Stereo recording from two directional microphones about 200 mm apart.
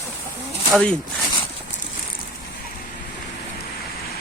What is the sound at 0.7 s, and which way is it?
Speech, 5° left (ahead or behind).